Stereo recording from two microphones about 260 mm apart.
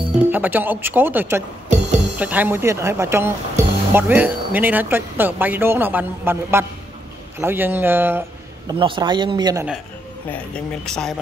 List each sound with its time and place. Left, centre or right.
0.3 s speech: centre
8.6 s speech: centre
10.3 s speech: centre